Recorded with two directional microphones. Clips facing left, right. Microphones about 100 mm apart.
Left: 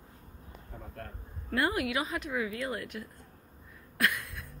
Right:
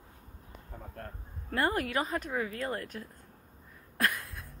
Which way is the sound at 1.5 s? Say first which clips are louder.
Even; 40° right (ahead or behind).